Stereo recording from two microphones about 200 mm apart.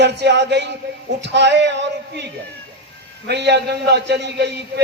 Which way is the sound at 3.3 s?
55° right (ahead or behind).